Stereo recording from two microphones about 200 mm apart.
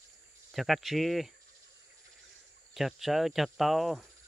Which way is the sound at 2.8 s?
Centre (ahead or behind).